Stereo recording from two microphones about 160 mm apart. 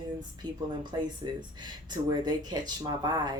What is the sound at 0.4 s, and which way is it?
Speech, 30° right (ahead or behind).